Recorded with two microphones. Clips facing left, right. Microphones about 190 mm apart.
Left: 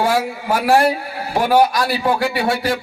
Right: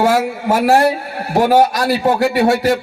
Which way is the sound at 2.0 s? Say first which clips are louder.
Right 6 dB; 45° right (ahead or behind).